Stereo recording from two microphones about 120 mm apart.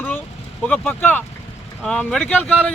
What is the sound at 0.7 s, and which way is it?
Speech, 15° left (ahead or behind).